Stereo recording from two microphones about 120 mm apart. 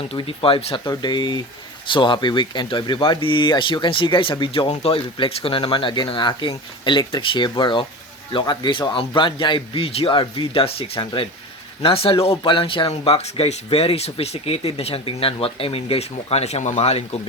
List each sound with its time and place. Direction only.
0.0 s speech: 50° left (ahead or behind)
11.0 s speech: 40° left (ahead or behind)
12.9 s speech: 60° left (ahead or behind)